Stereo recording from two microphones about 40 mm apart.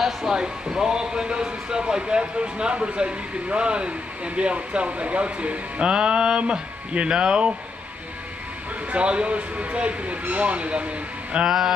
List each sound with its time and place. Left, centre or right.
0.0 s speech: centre
8.9 s speech: right
11.4 s a sound: centre